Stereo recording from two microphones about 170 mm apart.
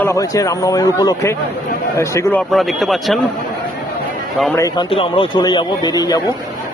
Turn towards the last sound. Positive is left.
turn(degrees=25)  # may be behind; listen again after turning